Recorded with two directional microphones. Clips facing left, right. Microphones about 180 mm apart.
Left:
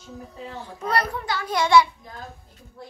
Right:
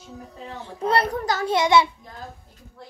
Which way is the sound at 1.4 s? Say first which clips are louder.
Left 1 dB; 25° right (ahead or behind).